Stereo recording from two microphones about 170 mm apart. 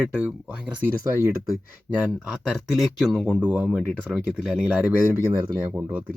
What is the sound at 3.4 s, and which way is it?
Speech, 10° right (ahead or behind).